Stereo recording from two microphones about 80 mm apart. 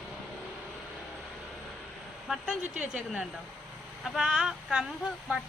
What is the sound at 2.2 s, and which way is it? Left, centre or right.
A woman's voice, centre.